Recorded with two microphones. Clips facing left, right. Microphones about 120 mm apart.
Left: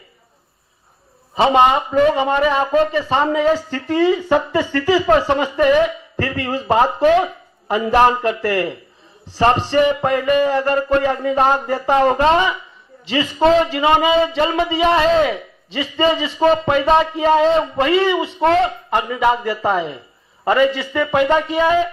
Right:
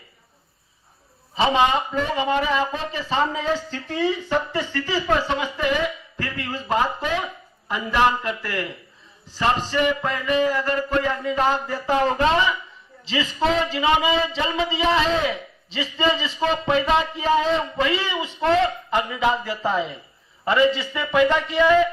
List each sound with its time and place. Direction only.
1.4 s a man's voice: 55° left (ahead or behind)